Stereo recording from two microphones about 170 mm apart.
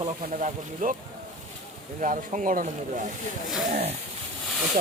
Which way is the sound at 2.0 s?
50° right (ahead or behind).